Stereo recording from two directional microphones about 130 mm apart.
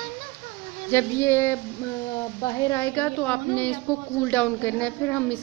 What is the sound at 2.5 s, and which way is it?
Music, 25° left (ahead or behind).